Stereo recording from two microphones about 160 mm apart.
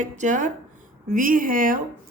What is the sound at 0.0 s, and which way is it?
A woman's voice, 50° right (ahead or behind).